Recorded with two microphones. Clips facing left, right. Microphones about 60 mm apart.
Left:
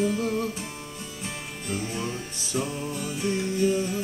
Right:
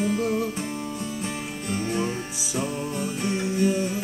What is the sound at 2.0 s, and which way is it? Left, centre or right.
Music, centre.